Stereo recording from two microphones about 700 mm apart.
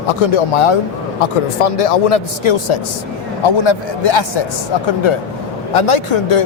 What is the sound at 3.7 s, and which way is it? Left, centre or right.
A man's voice, left.